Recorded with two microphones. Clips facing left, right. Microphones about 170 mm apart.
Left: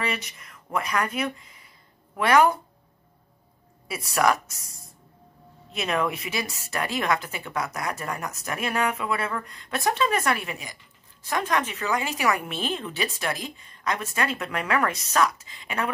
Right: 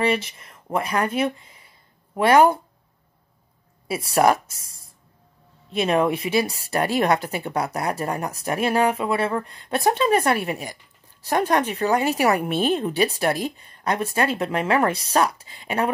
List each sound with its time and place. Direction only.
0.0 s speech: 30° right (ahead or behind)
4.1 s speech: 30° right (ahead or behind)